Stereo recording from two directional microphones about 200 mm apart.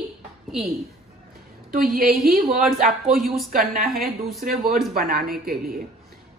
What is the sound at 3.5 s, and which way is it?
Speech, 40° right (ahead or behind).